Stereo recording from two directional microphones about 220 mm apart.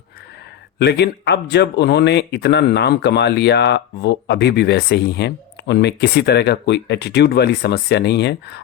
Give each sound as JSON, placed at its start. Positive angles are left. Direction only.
{"t": 0.8, "sound": "speech", "side_deg": 50}